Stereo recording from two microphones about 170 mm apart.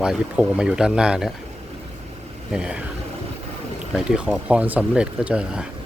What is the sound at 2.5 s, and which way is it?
Speech, 5° right (ahead or behind).